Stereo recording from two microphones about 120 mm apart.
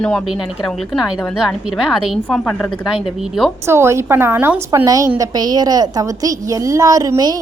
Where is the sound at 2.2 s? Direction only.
10° left (ahead or behind).